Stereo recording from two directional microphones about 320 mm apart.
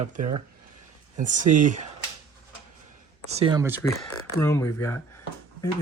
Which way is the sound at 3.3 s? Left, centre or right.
Centre.